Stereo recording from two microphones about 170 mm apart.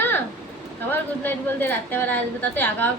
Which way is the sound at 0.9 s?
10° left (ahead or behind).